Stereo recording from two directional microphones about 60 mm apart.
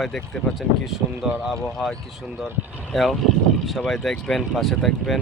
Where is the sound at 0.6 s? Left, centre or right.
Centre.